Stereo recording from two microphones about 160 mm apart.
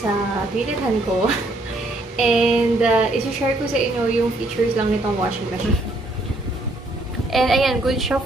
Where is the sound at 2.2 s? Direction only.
5° right (ahead or behind).